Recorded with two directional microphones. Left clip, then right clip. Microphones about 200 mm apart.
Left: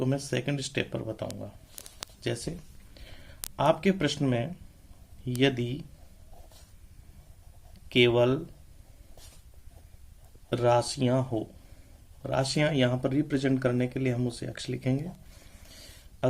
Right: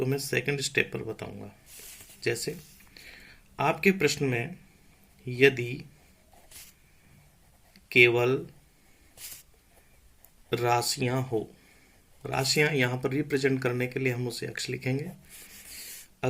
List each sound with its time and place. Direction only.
0.0 s speech: 35° left (ahead or behind)
2.9 s a sound: 35° left (ahead or behind)
5.4 s speech: 35° left (ahead or behind)
7.9 s speech: 35° left (ahead or behind)
10.5 s speech: 35° left (ahead or behind)